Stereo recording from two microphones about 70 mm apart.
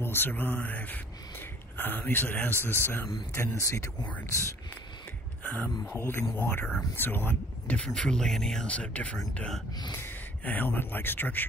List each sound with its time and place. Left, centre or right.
0.0 s speech: left
3.5 s speech: left
5.5 s speech: left
5.9 s speech: left
7.9 s speech: centre
9.9 s speech: left